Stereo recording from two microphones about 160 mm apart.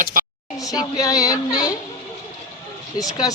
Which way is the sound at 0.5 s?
20° left (ahead or behind).